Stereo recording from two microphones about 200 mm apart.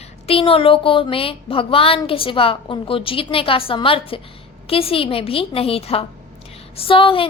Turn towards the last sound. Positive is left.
turn(degrees=25)  # may be behind; listen again after turning